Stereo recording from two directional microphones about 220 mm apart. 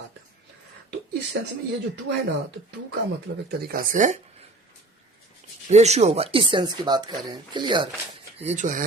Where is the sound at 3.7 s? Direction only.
40° right (ahead or behind).